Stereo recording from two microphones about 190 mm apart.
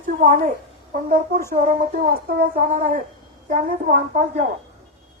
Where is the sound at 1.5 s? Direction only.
45° right (ahead or behind).